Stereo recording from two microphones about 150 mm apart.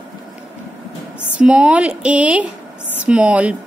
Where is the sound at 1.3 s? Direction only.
10° right (ahead or behind).